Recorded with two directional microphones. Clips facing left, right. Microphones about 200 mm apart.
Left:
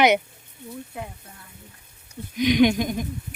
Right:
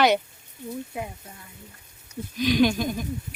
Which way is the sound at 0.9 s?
10° right (ahead or behind).